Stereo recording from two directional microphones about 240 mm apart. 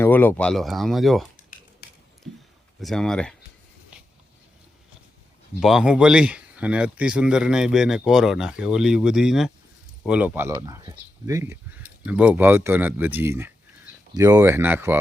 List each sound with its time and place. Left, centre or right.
0.0 s speech: centre
1.5 s a sound: left
2.8 s speech: centre
5.5 s speech: centre